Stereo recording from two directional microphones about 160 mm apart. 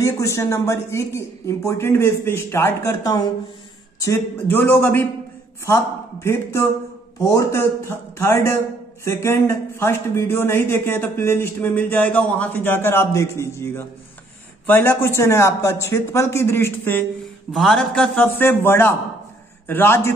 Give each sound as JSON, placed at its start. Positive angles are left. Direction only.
{"t": 0.0, "sound": "speech", "side_deg": 20}
{"t": 6.2, "sound": "speech", "side_deg": 15}
{"t": 17.5, "sound": "speech", "side_deg": 0}